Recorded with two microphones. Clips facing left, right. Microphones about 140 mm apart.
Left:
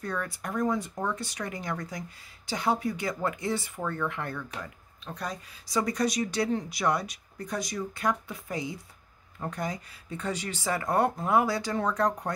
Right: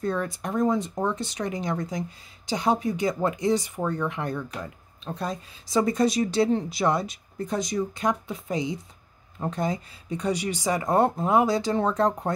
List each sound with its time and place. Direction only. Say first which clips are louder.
0.0 s speech: right 6 dB; 25° right (ahead or behind)